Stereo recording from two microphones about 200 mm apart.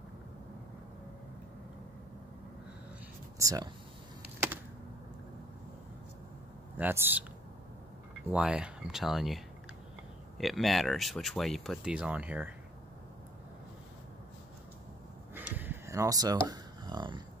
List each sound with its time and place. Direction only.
3.3 s speech: 15° right (ahead or behind)
6.8 s speech: 10° right (ahead or behind)
8.3 s speech: 5° right (ahead or behind)
15.3 s a sound: 10° right (ahead or behind)